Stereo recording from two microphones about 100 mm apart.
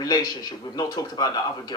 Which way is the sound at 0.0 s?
40° left (ahead or behind).